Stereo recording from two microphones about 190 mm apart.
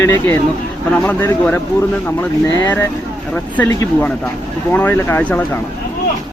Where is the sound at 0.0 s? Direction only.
10° left (ahead or behind).